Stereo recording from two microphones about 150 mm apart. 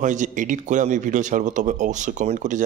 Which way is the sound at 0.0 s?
55° right (ahead or behind).